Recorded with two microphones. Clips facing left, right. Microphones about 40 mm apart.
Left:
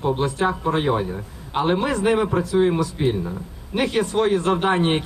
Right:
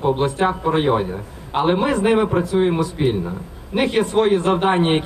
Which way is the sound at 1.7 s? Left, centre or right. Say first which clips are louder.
Right 3 dB; right.